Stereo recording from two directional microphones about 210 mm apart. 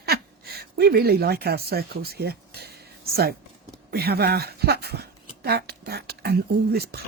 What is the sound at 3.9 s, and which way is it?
Speech, 50° right (ahead or behind).